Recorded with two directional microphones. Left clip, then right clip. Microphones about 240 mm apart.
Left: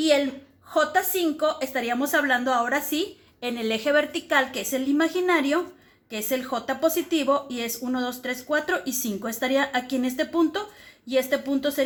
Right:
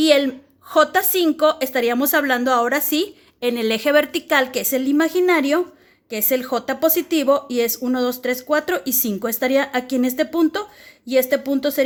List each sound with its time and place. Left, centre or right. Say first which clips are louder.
0.0 s a woman's voice: right 6 dB; right